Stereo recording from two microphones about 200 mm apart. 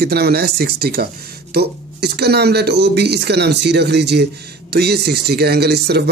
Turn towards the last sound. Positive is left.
turn(degrees=-55)  # may be behind; listen again after turning